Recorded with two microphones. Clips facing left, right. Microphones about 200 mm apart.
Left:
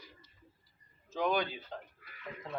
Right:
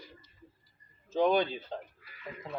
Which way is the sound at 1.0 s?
30° right (ahead or behind).